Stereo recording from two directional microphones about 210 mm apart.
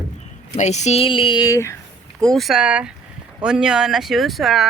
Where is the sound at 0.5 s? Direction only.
35° left (ahead or behind); by 1.7 s 15° left (ahead or behind).